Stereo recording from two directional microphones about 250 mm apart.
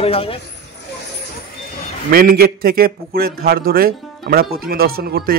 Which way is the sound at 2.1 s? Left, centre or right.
Right.